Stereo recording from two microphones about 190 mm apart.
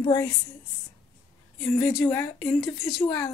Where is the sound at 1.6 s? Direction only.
10° left (ahead or behind).